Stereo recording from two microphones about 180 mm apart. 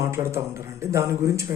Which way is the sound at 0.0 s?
15° right (ahead or behind).